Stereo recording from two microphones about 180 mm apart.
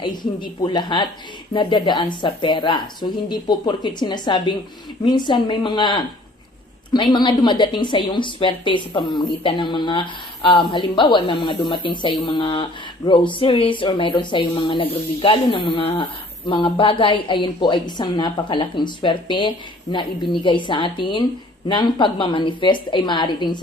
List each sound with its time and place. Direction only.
0.0 s a woman's voice: 25° left (ahead or behind)